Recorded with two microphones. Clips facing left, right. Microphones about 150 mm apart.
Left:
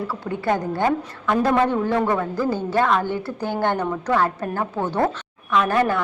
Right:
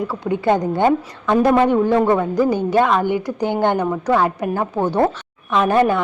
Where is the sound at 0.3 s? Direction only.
20° right (ahead or behind).